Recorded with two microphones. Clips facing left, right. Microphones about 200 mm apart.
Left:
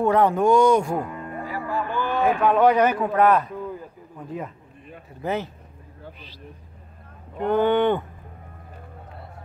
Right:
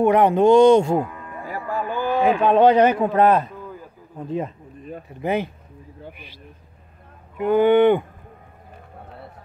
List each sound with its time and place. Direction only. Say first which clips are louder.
0.0 s speech: right 3 dB; 20° right (ahead or behind)
1.4 s a sound: right 2 dB; 45° right (ahead or behind)
2.2 s speech: right 3 dB; 25° right (ahead or behind)
5.2 s speech: right 4 dB; 15° right (ahead or behind)
7.3 s speech: right 4 dB; 10° right (ahead or behind)